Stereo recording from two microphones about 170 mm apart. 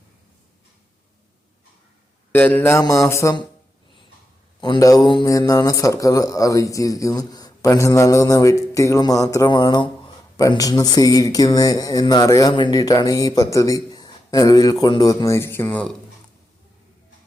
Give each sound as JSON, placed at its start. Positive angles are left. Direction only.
{"t": 2.3, "sound": "mantra", "side_deg": 10}
{"t": 4.6, "sound": "a man's voice", "side_deg": 25}